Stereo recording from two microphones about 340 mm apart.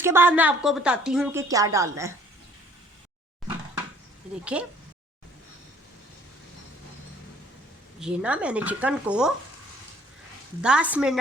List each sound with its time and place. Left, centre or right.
0.0 s a woman's voice: centre
4.5 s speech: centre
7.9 s speech: centre
10.6 s speech: centre